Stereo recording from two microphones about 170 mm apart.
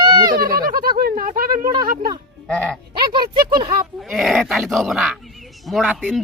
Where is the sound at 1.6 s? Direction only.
25° right (ahead or behind).